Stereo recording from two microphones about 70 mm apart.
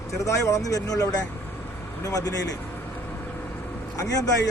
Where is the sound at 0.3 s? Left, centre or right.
Left.